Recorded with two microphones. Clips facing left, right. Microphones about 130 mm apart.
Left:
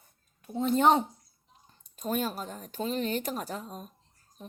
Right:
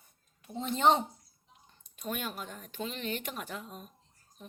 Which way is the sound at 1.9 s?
35° left (ahead or behind).